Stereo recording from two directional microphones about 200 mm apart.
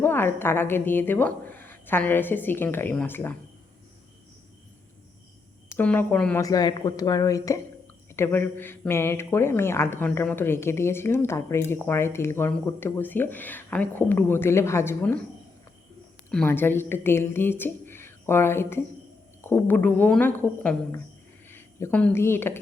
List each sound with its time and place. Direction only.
0.0 s a woman's voice: 10° left (ahead or behind)
5.7 s a woman's voice: 10° left (ahead or behind)
6.4 s a woman's voice: 20° left (ahead or behind)
16.3 s a woman's voice: 5° left (ahead or behind)